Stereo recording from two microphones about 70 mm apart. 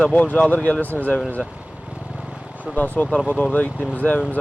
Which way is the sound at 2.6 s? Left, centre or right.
Left.